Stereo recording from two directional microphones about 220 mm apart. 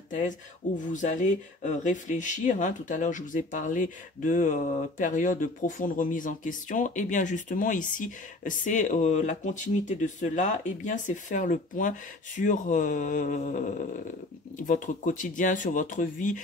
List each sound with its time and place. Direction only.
0.1 s speech: 35° left (ahead or behind)